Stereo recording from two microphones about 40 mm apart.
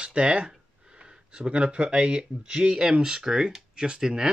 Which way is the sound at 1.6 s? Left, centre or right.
Centre.